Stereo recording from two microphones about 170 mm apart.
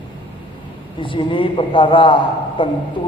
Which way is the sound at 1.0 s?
30° left (ahead or behind).